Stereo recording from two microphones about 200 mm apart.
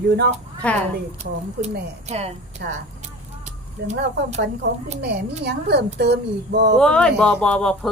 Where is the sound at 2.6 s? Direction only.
55° right (ahead or behind).